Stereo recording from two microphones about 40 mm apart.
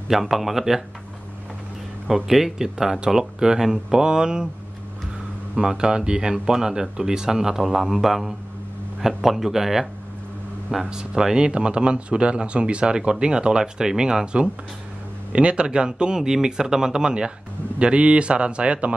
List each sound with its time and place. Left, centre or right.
0.1 s speech: centre
2.0 s speech: centre
5.6 s speech: centre
7.6 s music: centre
9.0 s speech: centre
10.9 s speech: centre
16.2 s speech: centre; by 18.9 s right